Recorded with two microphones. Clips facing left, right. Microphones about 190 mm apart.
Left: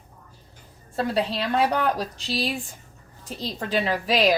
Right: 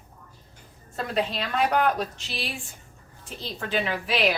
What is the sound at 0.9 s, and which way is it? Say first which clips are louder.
Speech: left 3 dB; 35° left (ahead or behind).